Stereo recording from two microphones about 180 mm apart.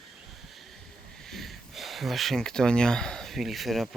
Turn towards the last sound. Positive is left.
turn(degrees=0)  # may be behind; listen again after turning